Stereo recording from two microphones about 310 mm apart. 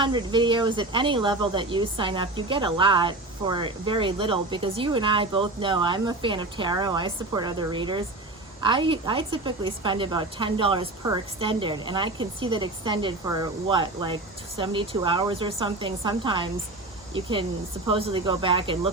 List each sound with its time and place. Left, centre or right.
0.0 s speech: centre